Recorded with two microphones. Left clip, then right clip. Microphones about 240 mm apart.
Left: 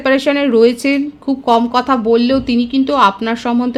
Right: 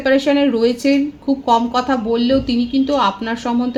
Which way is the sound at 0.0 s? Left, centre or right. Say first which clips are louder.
Left 1 dB; left.